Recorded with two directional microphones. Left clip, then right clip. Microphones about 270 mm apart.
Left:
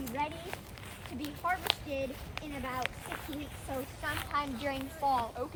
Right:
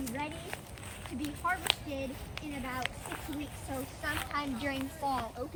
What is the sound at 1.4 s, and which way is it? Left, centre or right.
Speech, left.